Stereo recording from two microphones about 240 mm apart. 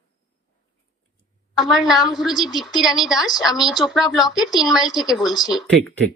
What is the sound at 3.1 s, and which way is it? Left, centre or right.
Speech, centre.